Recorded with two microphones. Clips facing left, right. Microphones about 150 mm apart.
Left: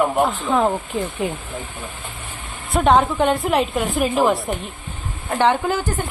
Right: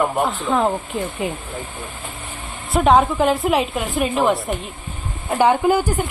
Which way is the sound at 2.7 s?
Centre (ahead or behind).